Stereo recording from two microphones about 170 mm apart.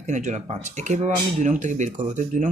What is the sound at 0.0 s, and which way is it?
Speech, 45° right (ahead or behind).